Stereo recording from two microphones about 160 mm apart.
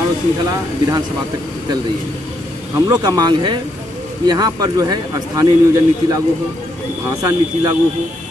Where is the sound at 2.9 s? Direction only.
25° right (ahead or behind).